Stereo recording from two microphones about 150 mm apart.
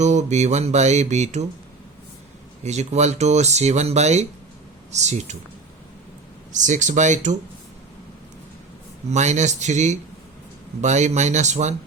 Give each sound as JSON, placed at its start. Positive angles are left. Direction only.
{"t": 0.0, "sound": "speech", "side_deg": -50}
{"t": 2.6, "sound": "speech", "side_deg": -50}
{"t": 6.5, "sound": "speech", "side_deg": -55}
{"t": 9.0, "sound": "speech", "side_deg": -50}